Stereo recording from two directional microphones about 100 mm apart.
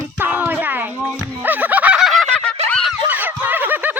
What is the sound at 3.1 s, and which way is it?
Snicker, 20° right (ahead or behind).